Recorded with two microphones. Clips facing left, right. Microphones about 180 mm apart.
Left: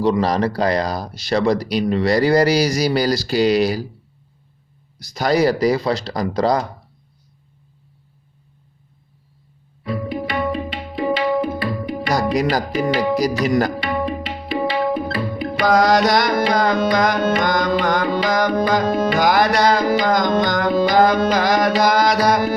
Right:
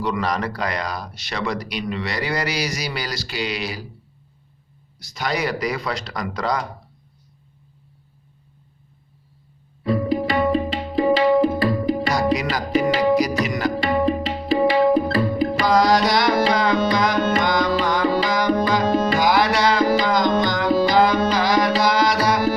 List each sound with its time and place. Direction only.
0.0 s speech: 30° left (ahead or behind)
5.1 s speech: 35° left (ahead or behind)
9.8 s tabla: 35° right (ahead or behind)
12.1 s music: 40° left (ahead or behind)
13.4 s speech: 40° left (ahead or behind)
14.0 s music: 30° right (ahead or behind)
14.4 s tabla: 40° right (ahead or behind)
15.6 s music: 50° left (ahead or behind)
16.9 s tabla: 45° left (ahead or behind)
17.2 s music: 40° left (ahead or behind)
18.2 s tabla: 45° left (ahead or behind)
21.8 s music: 45° left (ahead or behind)